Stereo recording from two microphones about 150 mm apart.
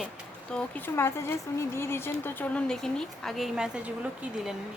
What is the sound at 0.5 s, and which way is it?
Speech, 10° left (ahead or behind).